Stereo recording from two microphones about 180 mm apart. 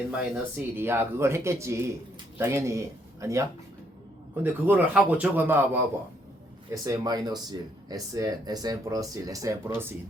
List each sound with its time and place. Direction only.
0.1 s speech: 5° right (ahead or behind)
4.6 s speech: 10° right (ahead or behind)
6.8 s speech: 20° right (ahead or behind)